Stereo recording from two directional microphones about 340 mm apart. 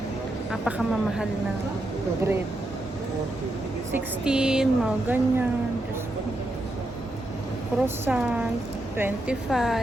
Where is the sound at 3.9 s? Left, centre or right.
Centre.